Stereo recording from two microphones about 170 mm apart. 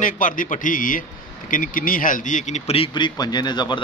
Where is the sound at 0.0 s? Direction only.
50° left (ahead or behind).